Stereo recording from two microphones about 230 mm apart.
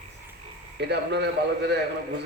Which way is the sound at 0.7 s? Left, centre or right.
Right.